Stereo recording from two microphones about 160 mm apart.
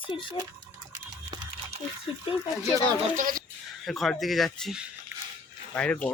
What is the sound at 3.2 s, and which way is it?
Speech, 60° right (ahead or behind).